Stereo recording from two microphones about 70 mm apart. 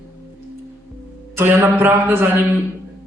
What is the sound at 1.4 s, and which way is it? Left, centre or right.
A man's voice, right.